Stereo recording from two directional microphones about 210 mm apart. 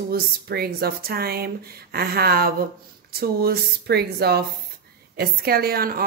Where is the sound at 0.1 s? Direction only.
45° right (ahead or behind).